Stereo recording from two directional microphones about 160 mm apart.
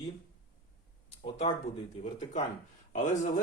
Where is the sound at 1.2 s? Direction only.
35° left (ahead or behind).